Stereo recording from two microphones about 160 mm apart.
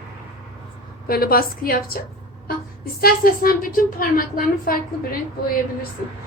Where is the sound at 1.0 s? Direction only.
70° left (ahead or behind).